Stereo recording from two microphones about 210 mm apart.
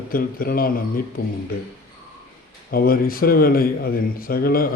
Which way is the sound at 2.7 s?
45° left (ahead or behind).